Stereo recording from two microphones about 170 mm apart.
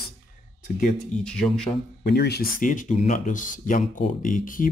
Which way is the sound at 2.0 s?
70° left (ahead or behind).